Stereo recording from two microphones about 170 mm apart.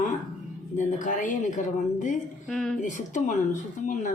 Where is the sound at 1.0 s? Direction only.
50° left (ahead or behind).